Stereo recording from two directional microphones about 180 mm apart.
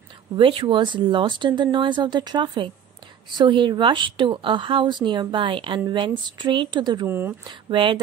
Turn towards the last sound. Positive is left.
turn(degrees=-25)  # may be behind; listen again after turning